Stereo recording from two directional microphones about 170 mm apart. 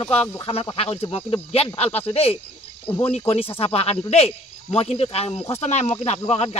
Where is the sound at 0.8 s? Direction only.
35° left (ahead or behind).